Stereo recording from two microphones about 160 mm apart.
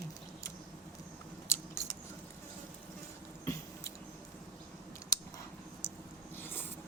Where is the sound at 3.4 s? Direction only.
15° left (ahead or behind).